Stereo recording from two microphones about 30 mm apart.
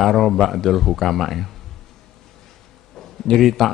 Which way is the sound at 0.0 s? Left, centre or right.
Centre.